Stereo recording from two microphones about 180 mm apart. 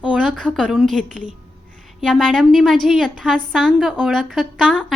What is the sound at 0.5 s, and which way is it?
A woman's voice, 5° left (ahead or behind).